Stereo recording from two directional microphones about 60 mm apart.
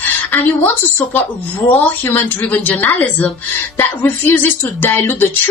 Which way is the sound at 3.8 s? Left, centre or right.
Left.